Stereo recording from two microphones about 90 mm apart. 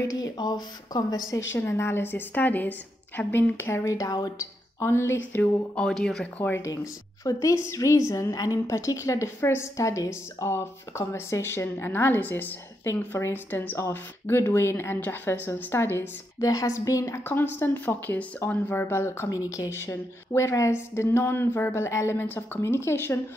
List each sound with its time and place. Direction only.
0.0 s a woman's voice: 40° left (ahead or behind)
0.4 s speech: 50° left (ahead or behind)
1.3 s a woman's voice: 30° left (ahead or behind)
4.7 s speech: 30° left (ahead or behind)
5.8 s speech: 5° left (ahead or behind)
6.7 s a woman's voice: 40° left (ahead or behind)
16.4 s a woman's voice: 40° left (ahead or behind)
17.2 s a woman's voice: 25° left (ahead or behind)